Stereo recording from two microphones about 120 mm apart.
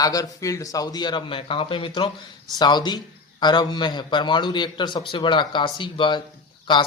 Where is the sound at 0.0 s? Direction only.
30° left (ahead or behind).